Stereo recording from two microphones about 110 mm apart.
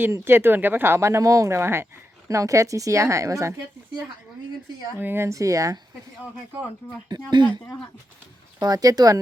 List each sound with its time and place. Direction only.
0.0 s speech: 20° right (ahead or behind)
4.9 s speech: 20° right (ahead or behind)
7.1 s speech: 45° right (ahead or behind)